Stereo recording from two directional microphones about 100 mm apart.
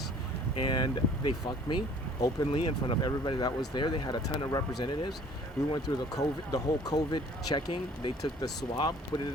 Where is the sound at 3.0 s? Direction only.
45° left (ahead or behind).